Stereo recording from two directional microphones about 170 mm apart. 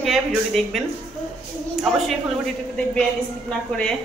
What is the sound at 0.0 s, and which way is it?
A woman's voice, centre (ahead or behind).